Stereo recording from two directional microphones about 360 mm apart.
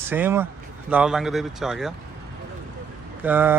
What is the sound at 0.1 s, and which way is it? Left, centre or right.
A man's voice, centre.